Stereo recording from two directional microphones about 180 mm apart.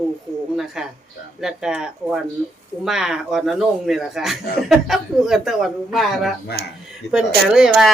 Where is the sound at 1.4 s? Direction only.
Centre (ahead or behind).